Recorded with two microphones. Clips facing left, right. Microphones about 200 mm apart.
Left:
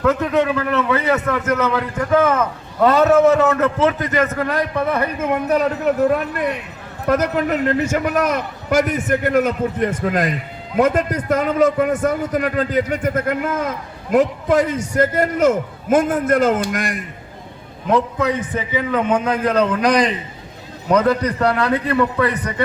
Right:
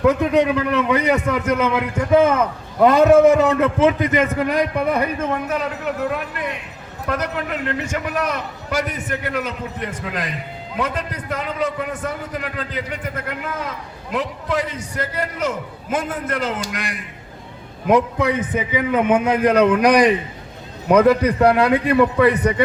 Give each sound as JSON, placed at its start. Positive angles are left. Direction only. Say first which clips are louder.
{"t": 0.0, "sound": "a man's voice", "louder": "right 1 dB", "side_deg": -15}
{"t": 5.5, "sound": "a man's voice", "louder": "left 6 dB", "side_deg": 40}
{"t": 17.8, "sound": "a man's voice", "louder": "right 1 dB", "side_deg": -15}